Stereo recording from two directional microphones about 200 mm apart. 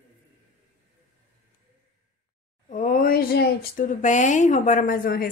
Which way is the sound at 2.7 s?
40° left (ahead or behind).